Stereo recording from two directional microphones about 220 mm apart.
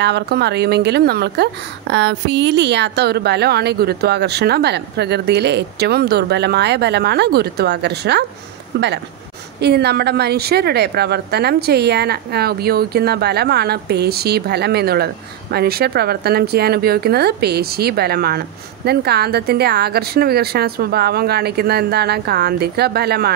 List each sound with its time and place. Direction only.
0.0 s a woman's voice: 50° right (ahead or behind)